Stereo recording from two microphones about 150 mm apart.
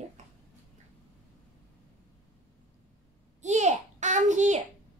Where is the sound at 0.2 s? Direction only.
50° right (ahead or behind).